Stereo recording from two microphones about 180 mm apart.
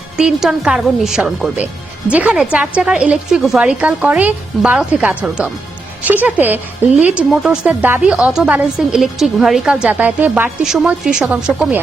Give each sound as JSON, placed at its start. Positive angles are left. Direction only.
{"t": 0.2, "sound": "a woman's voice", "side_deg": -5}